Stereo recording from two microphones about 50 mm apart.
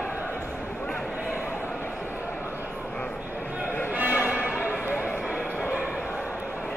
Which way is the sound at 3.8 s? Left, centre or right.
Right.